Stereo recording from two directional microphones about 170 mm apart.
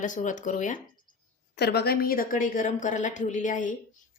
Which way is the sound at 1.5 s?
70° left (ahead or behind).